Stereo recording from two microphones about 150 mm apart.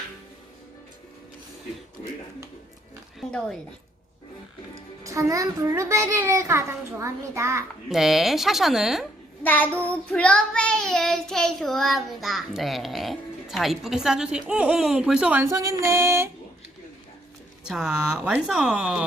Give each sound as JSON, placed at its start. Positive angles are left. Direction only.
{"t": 3.2, "sound": "a sound", "side_deg": 0}
{"t": 4.7, "sound": "a child's voice", "side_deg": -20}
{"t": 7.9, "sound": "child singing", "side_deg": 0}
{"t": 9.4, "sound": "child singing", "side_deg": 10}
{"t": 15.8, "sound": "a sound", "side_deg": -15}
{"t": 17.7, "sound": "child singing", "side_deg": -5}